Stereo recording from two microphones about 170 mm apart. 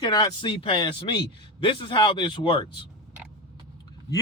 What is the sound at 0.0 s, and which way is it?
Speech, 25° left (ahead or behind).